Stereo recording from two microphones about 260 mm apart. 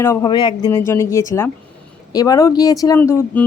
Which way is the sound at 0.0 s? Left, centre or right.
Centre.